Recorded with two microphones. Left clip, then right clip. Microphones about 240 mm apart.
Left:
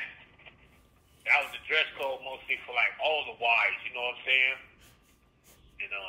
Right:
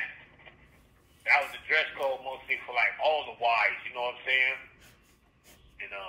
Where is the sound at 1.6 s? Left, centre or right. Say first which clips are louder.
Right 1 dB; centre.